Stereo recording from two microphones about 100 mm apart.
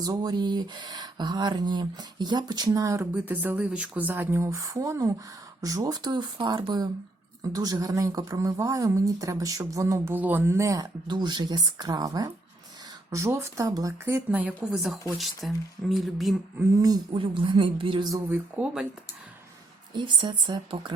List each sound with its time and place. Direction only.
0.0 s speech: 40° right (ahead or behind)
3.1 s speech: 15° right (ahead or behind)
10.2 s speech: 20° right (ahead or behind)
11.1 s speech: 45° right (ahead or behind)
13.1 s speech: 30° right (ahead or behind)
14.1 s speech: 15° right (ahead or behind)
15.2 s speech: centre (ahead or behind)
17.1 s a woman's voice: 65° right (ahead or behind)
18.1 s speech: 25° right (ahead or behind)
18.6 s speech: 10° right (ahead or behind)
19.9 s speech: 50° right (ahead or behind)